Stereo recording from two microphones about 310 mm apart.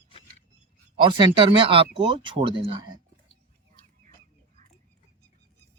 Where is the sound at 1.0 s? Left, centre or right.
Centre.